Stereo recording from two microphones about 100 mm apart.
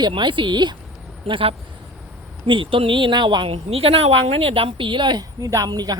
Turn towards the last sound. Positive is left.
turn(degrees=-40)  # may be behind; listen again after turning